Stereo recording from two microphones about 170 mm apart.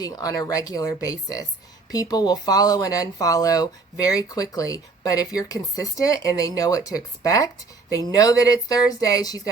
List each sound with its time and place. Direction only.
0.0 s speech: 20° left (ahead or behind)